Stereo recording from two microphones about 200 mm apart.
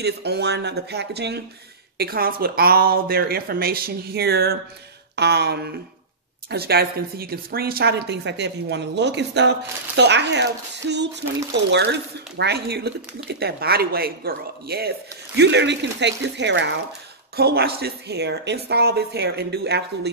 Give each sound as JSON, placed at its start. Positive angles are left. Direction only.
{"t": 0.0, "sound": "speech", "side_deg": -55}